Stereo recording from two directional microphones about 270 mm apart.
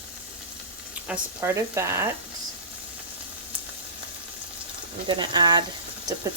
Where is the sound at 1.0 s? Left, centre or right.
Centre.